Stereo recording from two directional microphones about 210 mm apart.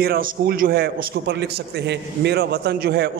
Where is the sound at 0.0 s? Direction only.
45° right (ahead or behind).